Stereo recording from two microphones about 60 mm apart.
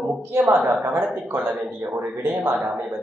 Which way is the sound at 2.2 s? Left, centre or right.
Right.